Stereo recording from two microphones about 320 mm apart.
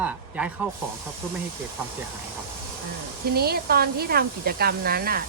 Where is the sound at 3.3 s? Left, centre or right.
Right.